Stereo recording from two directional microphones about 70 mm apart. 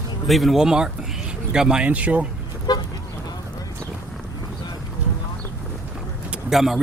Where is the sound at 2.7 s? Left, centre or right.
Left.